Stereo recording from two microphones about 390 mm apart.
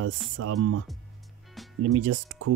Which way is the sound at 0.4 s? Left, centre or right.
Right.